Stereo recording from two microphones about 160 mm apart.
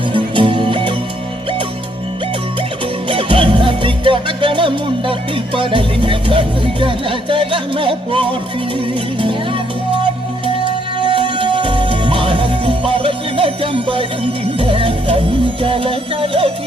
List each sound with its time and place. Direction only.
0.1 s music: 30° right (ahead or behind)
3.1 s music: 30° right (ahead or behind)
5.5 s speech: 30° right (ahead or behind)
11.0 s music: 30° right (ahead or behind)
15.6 s speech: 35° right (ahead or behind)